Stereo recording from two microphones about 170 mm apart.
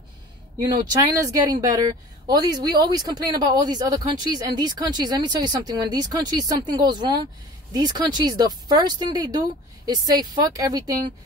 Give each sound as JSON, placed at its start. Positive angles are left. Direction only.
{"t": 0.7, "sound": "speech", "side_deg": -25}
{"t": 10.5, "sound": "speech", "side_deg": -20}